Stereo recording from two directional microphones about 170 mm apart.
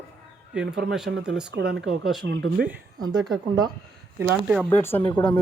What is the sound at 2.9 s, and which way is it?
Speech, 25° right (ahead or behind).